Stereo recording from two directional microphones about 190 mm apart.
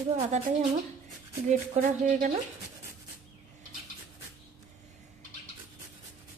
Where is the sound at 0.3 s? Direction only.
35° right (ahead or behind).